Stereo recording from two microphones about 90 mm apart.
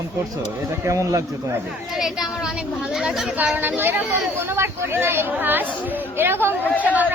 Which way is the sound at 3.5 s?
20° right (ahead or behind).